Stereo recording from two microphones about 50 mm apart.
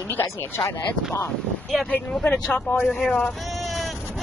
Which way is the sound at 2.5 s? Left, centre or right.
Left.